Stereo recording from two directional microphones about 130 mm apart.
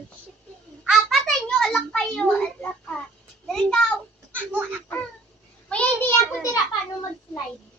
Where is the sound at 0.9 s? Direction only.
Centre (ahead or behind).